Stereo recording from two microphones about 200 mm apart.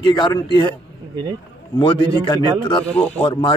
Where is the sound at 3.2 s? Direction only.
20° left (ahead or behind).